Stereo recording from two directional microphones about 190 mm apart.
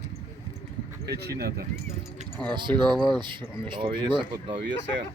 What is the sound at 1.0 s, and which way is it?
Speech, 60° right (ahead or behind).